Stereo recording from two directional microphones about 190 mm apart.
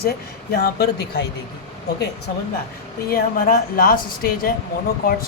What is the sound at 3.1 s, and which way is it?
Speech, 50° left (ahead or behind).